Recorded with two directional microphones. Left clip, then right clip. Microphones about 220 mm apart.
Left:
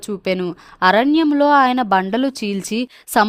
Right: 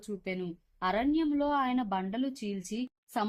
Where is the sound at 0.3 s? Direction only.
55° left (ahead or behind).